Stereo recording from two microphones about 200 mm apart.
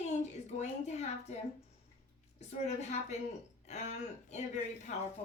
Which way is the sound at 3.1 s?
35° left (ahead or behind).